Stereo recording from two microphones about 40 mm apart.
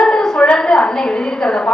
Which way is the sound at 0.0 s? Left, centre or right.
Centre.